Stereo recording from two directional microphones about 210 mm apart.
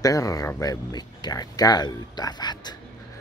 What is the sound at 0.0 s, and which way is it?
Speech, 15° left (ahead or behind).